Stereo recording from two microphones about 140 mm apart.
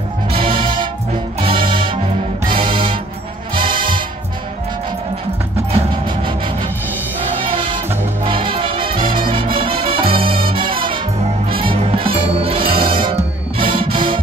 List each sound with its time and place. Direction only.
0.3 s music: 40° right (ahead or behind)
5.7 s music: 45° right (ahead or behind)
7.5 s music: 40° right (ahead or behind)